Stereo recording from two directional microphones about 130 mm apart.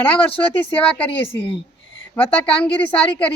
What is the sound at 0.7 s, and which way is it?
Speech, 10° left (ahead or behind).